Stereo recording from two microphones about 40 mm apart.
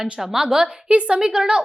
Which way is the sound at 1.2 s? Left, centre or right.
Centre.